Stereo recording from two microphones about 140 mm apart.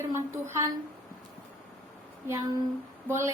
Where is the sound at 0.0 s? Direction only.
20° right (ahead or behind).